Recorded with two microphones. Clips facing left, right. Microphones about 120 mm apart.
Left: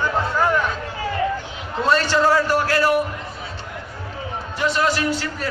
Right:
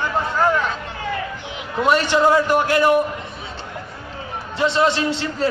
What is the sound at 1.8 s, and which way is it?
A man's voice, 15° right (ahead or behind).